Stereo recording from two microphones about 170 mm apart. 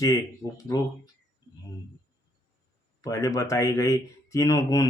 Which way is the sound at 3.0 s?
20° left (ahead or behind).